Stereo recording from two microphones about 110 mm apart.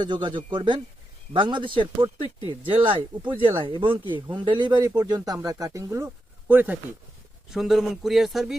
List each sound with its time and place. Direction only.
0.0 s speech: 45° right (ahead or behind); by 6.1 s 30° right (ahead or behind)
6.5 s speech: 15° right (ahead or behind)
7.5 s speech: centre (ahead or behind)